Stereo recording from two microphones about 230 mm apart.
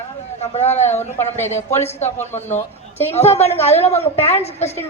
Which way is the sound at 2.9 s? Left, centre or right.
Centre.